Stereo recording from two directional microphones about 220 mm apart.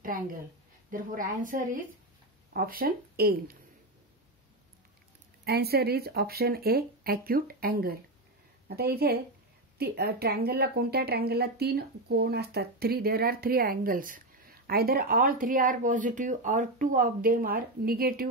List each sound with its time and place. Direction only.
0.0 s a sound: 40° right (ahead or behind)
0.9 s a woman's voice: 40° right (ahead or behind)
5.4 s speech: 45° right (ahead or behind)